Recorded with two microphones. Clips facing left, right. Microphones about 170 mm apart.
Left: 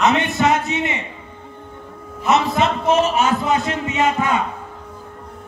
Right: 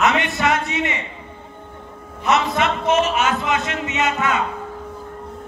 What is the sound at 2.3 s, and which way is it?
A man's voice, 35° left (ahead or behind).